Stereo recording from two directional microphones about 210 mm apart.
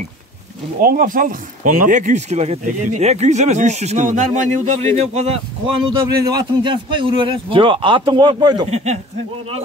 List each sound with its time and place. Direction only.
0.7 s speech: 40° right (ahead or behind)
5.9 s speech: 15° right (ahead or behind)
8.6 s speech: 30° right (ahead or behind)